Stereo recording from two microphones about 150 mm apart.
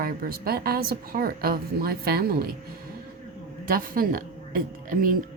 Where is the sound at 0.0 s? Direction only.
80° right.